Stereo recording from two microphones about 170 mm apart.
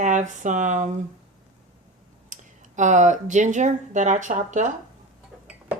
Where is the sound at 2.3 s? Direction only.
45° right (ahead or behind).